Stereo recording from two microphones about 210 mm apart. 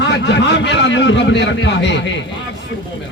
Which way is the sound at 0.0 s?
55° left (ahead or behind).